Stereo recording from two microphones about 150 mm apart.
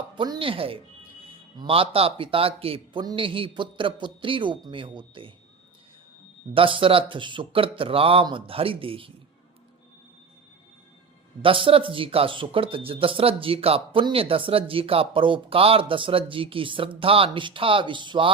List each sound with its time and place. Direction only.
0.2 s speech: 35° right (ahead or behind)
6.5 s speech: 35° right (ahead or behind)
11.4 s speech: 35° right (ahead or behind)